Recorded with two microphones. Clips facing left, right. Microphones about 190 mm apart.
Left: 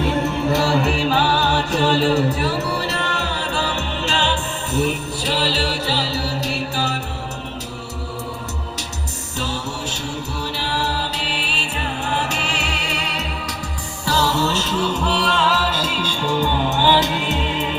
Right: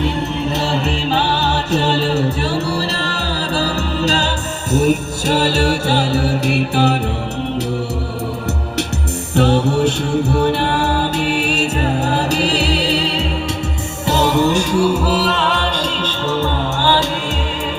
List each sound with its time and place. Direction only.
0.4 s music: 20° right (ahead or behind); by 7.0 s 60° right (ahead or behind)
9.3 s music: 60° right (ahead or behind); by 13.2 s 30° right (ahead or behind)
14.0 s music: 20° right (ahead or behind); by 17.4 s 20° left (ahead or behind)